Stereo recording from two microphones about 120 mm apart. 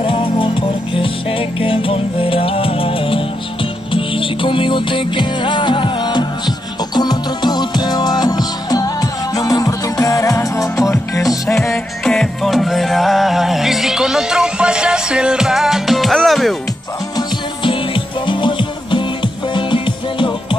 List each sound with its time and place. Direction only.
0.0 s music: 45° left (ahead or behind); by 11.3 s 30° left (ahead or behind)
11.4 s music: centre (ahead or behind)
17.6 s music: 45° left (ahead or behind)